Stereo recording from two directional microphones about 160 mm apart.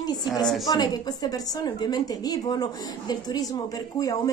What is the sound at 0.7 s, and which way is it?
A woman's voice, 25° left (ahead or behind).